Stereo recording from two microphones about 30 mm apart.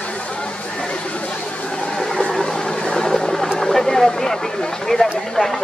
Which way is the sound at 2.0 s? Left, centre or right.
Left.